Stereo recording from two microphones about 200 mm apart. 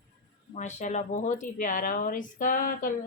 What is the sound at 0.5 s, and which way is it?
Speech, 35° left (ahead or behind).